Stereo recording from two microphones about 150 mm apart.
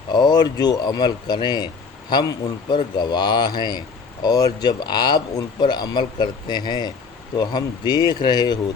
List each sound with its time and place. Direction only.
0.1 s speech: 30° left (ahead or behind)